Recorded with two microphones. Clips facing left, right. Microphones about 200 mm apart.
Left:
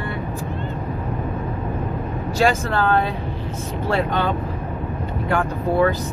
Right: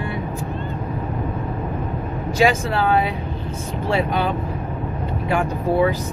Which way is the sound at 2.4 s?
10° right (ahead or behind).